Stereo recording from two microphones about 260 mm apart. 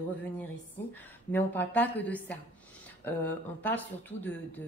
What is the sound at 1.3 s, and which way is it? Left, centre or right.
Speech, centre.